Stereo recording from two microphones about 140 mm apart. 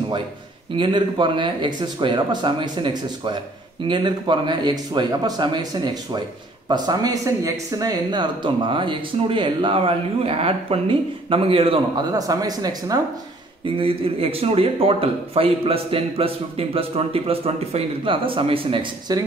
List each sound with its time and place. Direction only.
0.7 s speech: 35° right (ahead or behind)
12.1 s speech: 25° right (ahead or behind)
13.7 s a man's voice: 40° right (ahead or behind)